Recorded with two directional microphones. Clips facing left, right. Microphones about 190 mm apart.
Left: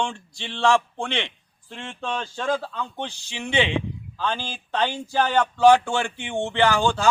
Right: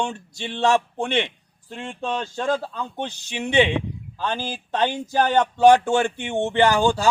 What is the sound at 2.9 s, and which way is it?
Speech, 15° right (ahead or behind).